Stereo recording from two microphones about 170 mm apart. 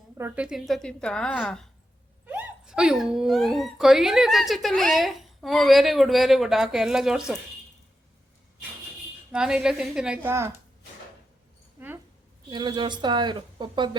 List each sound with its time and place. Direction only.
0.2 s speech: 10° right (ahead or behind)
2.2 s speech: 10° right (ahead or behind)
9.3 s speech: 5° right (ahead or behind)
12.5 s speech: 25° right (ahead or behind)